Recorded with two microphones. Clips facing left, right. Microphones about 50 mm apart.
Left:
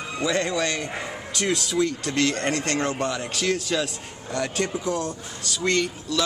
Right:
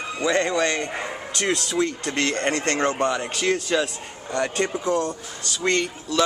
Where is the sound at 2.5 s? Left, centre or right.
Right.